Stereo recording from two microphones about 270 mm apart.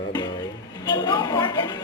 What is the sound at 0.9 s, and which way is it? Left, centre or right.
Speech, centre.